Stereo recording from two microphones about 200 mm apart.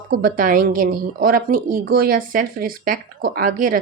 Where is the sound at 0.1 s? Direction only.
45° right (ahead or behind).